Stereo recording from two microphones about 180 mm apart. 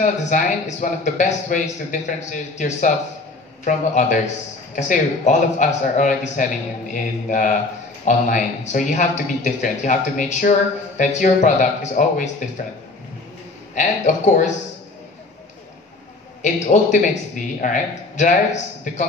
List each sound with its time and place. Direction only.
0.0 s a man's voice: 45° left (ahead or behind)
13.7 s speech: 40° left (ahead or behind)
16.5 s a man's voice: 40° left (ahead or behind)